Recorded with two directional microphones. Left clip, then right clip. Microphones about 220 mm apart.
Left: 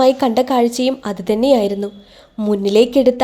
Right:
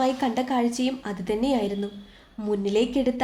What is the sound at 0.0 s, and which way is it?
A woman's voice, 40° left (ahead or behind).